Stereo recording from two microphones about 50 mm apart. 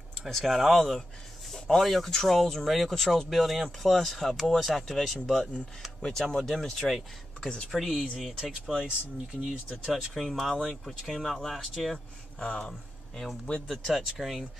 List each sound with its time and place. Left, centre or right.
0.4 s speech: centre
7.3 s speech: centre
7.7 s speech: centre
8.8 s speech: centre
10.1 s speech: centre
12.4 s speech: centre